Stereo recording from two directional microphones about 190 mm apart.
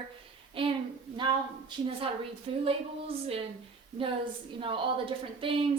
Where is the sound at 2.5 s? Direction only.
30° right (ahead or behind).